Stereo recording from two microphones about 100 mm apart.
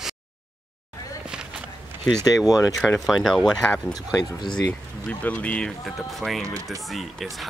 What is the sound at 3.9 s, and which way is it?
Speech, 40° left (ahead or behind).